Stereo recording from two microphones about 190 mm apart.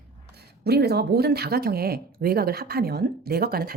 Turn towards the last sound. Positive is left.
turn(degrees=-50)  # may be behind; listen again after turning